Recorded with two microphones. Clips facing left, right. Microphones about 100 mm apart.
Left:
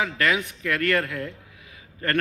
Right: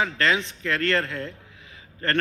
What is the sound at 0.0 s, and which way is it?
A man's voice, 30° right (ahead or behind).